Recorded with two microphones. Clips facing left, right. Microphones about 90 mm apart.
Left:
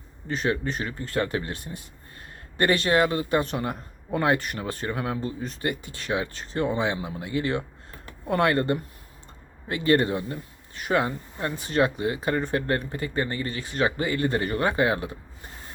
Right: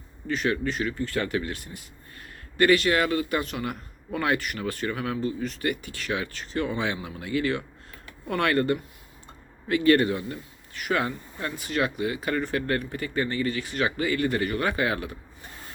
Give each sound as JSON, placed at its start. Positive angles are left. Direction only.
{"t": 0.3, "sound": "speech", "side_deg": 25}